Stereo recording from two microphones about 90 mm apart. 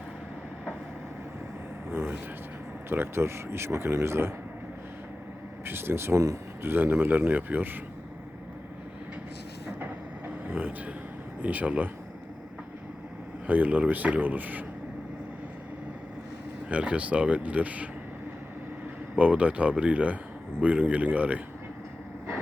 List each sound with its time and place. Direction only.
1.9 s vehicle: 25° right (ahead or behind)
2.9 s speech: 25° right (ahead or behind)
5.6 s speech: 25° right (ahead or behind)
9.6 s train: 20° right (ahead or behind)
11.4 s speech: 15° right (ahead or behind)
13.5 s speech: 20° right (ahead or behind)
16.6 s speech: 15° right (ahead or behind)
19.1 s speech: 15° right (ahead or behind)